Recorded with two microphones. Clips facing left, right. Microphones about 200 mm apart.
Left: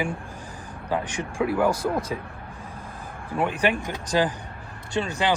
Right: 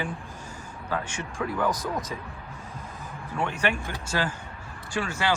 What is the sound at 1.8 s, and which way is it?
Speech, 30° left (ahead or behind).